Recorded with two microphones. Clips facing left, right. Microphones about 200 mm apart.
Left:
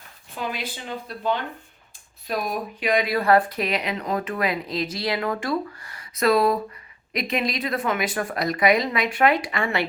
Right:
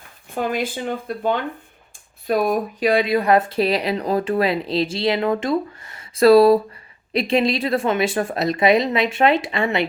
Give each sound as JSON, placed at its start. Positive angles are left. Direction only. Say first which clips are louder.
{"t": 0.3, "sound": "speech", "louder": "right 8 dB", "side_deg": -50}
{"t": 2.8, "sound": "speech", "louder": "right 3 dB", "side_deg": -30}